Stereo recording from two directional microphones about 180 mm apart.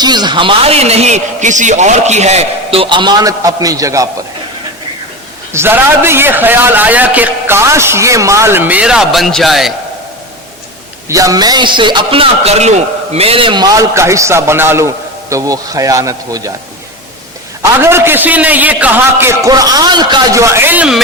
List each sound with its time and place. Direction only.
0.0 s a man's voice: 25° right (ahead or behind)
5.5 s a man's voice: 15° right (ahead or behind)
11.1 s a man's voice: 20° right (ahead or behind)
17.6 s a man's voice: 15° right (ahead or behind)